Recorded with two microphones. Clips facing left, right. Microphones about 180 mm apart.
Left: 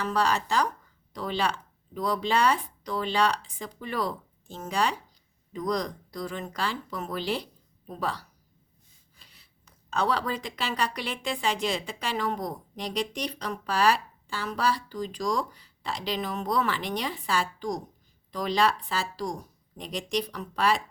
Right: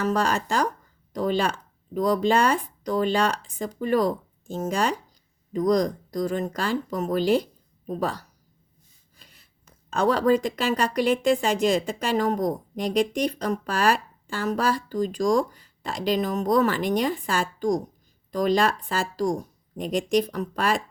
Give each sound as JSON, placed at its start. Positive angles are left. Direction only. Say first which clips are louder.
{"t": 0.0, "sound": "speech", "louder": "right 3 dB", "side_deg": -45}